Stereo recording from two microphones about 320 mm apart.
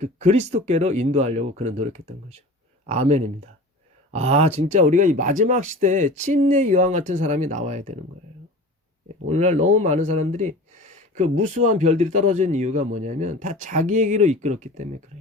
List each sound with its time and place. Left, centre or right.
0.0 s speech: right
9.2 s speech: right